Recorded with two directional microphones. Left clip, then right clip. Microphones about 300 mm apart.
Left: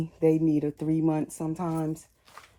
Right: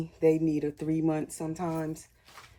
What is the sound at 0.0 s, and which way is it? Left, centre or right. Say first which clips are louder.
Speech: left 1 dB; centre.